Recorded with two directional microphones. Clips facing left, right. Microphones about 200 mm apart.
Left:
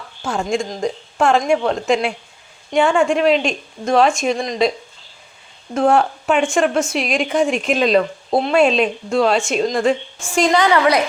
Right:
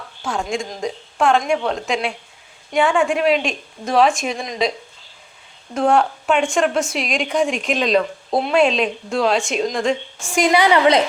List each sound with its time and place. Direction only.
0.2 s a woman's voice: centre (ahead or behind)
5.7 s speech: centre (ahead or behind)
10.3 s a woman's voice: 10° right (ahead or behind)